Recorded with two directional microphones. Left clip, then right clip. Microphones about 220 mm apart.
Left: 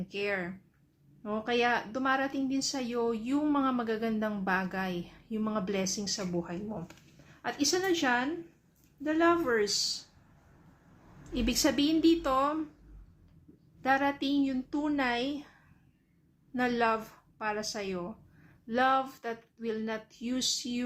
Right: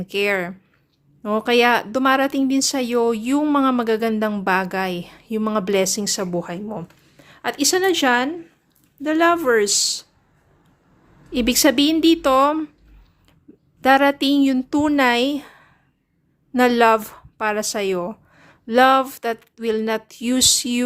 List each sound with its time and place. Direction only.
0.1 s a woman's voice: 50° right (ahead or behind)
11.3 s speech: 45° right (ahead or behind)
13.8 s speech: 50° right (ahead or behind)